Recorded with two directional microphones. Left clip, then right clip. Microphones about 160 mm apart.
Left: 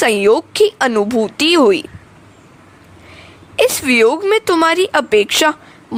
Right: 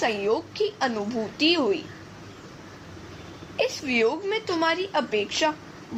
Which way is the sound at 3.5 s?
65° left (ahead or behind).